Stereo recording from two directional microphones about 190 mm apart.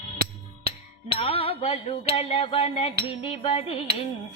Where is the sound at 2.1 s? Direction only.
30° left (ahead or behind).